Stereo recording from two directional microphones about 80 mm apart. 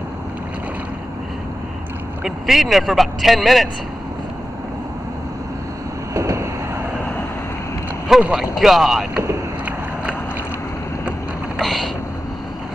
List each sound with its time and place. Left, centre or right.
2.2 s speech: centre
6.1 s vehicle: right
8.2 s speech: centre
11.5 s a sound: centre